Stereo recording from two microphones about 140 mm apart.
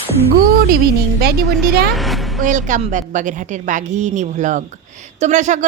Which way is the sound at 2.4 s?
65° right (ahead or behind).